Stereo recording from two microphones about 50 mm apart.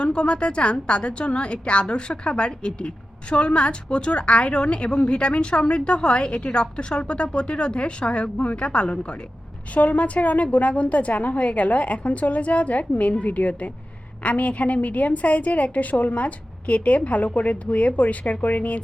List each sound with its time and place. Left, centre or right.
0.0 s a woman's voice: left